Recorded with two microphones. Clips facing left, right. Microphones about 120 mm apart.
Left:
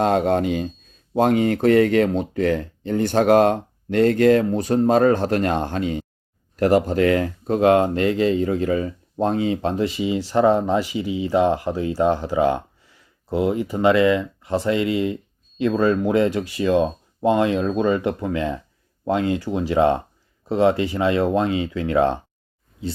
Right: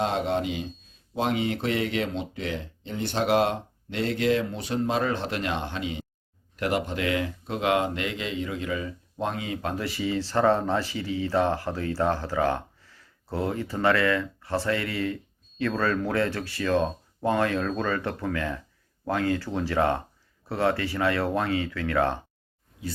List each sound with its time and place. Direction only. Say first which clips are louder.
0.0 s speech: left 7 dB; 50° left (ahead or behind); by 22.2 s 20° left (ahead or behind)